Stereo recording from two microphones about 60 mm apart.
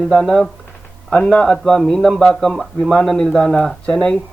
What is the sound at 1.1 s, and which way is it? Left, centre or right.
Speech, centre.